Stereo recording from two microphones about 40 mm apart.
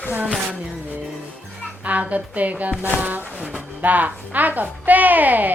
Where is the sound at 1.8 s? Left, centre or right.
Right.